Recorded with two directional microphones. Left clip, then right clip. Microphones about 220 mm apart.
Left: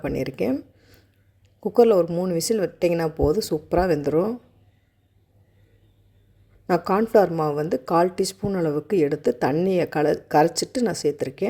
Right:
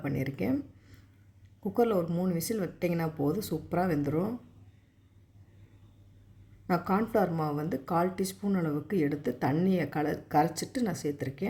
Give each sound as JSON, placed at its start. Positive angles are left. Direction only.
{"t": 0.0, "sound": "speech", "side_deg": 35}
{"t": 6.7, "sound": "speech", "side_deg": 35}